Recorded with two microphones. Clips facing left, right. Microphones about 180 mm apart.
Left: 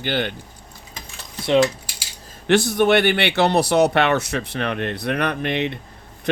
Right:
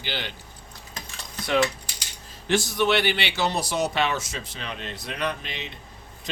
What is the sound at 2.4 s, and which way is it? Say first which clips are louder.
Speech: left 6 dB; 60° left (ahead or behind).